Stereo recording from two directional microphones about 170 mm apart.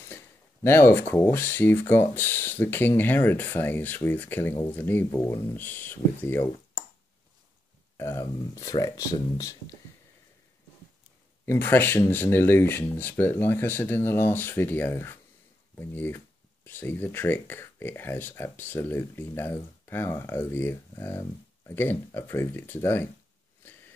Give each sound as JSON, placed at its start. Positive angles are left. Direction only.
{"t": 0.7, "sound": "speech", "side_deg": 15}
{"t": 8.0, "sound": "speech", "side_deg": 15}
{"t": 11.4, "sound": "speech", "side_deg": 15}